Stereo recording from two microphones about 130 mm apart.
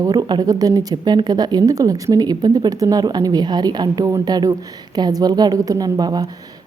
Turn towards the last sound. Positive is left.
turn(degrees=-30)  # may be behind; listen again after turning